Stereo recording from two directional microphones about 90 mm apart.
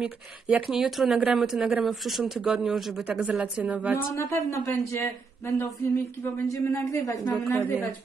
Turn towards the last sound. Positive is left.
turn(degrees=25)  # may be behind; listen again after turning